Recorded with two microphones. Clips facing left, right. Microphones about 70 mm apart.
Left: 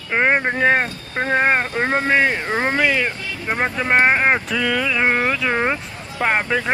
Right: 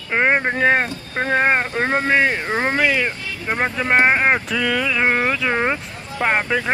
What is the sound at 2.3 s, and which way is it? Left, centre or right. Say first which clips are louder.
Speech: even; centre.